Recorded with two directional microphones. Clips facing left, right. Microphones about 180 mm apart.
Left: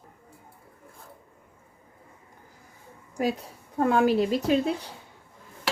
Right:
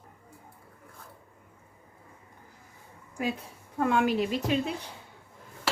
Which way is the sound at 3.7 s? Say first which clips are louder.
Left 4 dB; 35° left (ahead or behind).